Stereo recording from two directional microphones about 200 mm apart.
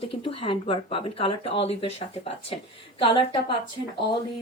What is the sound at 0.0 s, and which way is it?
Speech, 25° left (ahead or behind).